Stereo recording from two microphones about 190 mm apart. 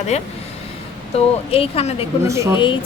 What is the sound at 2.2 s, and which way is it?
Speech, 15° right (ahead or behind).